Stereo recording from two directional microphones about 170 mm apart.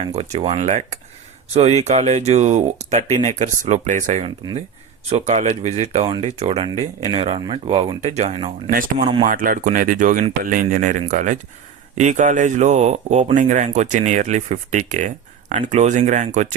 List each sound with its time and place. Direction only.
0.0 s speech: 40° right (ahead or behind)
9.2 s speech: 55° right (ahead or behind)